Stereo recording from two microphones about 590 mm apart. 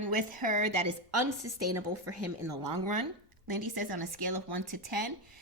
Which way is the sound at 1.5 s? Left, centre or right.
Right.